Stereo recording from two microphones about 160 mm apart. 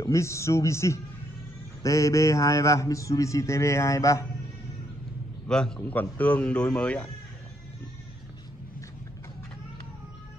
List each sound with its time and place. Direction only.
0.0 s a man's voice: 20° left (ahead or behind)
5.5 s a man's voice: 5° left (ahead or behind)